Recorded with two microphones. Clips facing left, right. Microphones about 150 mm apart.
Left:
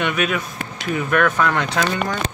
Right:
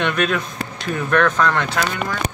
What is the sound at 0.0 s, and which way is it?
Speech, 10° left (ahead or behind).